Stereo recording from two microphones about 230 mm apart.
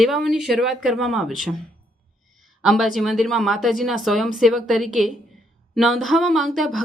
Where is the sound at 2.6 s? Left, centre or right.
Centre.